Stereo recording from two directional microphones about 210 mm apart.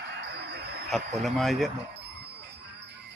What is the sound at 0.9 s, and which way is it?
Speech, centre (ahead or behind).